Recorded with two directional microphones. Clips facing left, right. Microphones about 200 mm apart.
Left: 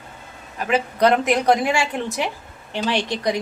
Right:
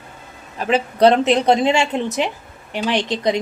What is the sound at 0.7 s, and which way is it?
A woman's voice, 30° right (ahead or behind).